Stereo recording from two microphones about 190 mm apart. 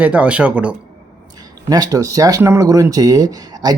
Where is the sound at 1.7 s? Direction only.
20° right (ahead or behind).